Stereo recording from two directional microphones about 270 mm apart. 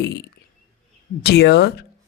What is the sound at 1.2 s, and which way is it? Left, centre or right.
Speech, left.